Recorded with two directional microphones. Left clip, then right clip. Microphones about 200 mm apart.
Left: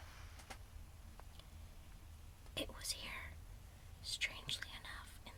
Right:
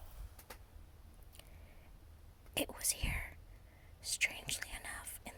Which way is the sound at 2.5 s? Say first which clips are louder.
Right 5 dB; 35° right (ahead or behind).